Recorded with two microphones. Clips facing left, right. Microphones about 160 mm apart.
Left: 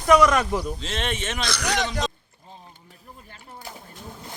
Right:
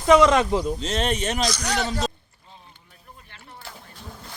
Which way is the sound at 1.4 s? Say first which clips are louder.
Right 1 dB; 60° left (ahead or behind).